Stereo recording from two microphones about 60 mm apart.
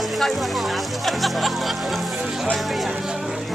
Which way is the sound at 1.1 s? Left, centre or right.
Centre.